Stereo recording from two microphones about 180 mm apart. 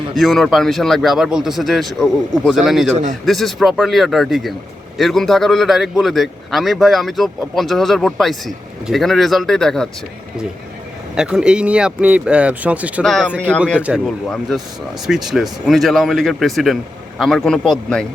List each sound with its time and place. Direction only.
0.2 s a man's voice: centre (ahead or behind)
2.9 s speech: 45° right (ahead or behind)
3.2 s a man's voice: centre (ahead or behind)
11.1 s a man's voice: 5° right (ahead or behind)
13.0 s a man's voice: 5° left (ahead or behind)
13.7 s a man's voice: 5° right (ahead or behind)